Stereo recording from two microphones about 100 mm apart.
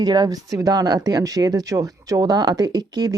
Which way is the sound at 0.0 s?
40° right (ahead or behind).